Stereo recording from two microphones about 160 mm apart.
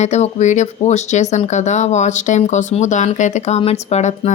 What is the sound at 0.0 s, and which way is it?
A woman's voice, 45° left (ahead or behind).